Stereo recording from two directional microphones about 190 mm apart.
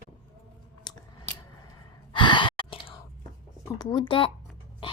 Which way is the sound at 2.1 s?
25° left (ahead or behind).